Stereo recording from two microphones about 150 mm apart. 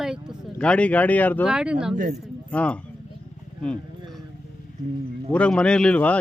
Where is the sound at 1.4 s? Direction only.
5° right (ahead or behind).